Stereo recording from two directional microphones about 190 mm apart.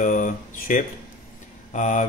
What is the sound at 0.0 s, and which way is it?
Speech, 45° left (ahead or behind).